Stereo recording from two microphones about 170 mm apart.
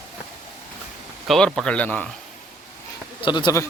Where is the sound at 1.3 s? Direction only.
Centre (ahead or behind).